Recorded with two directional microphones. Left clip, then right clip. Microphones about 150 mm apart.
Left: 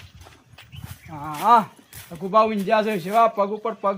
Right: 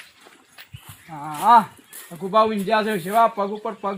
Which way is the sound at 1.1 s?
35° left (ahead or behind).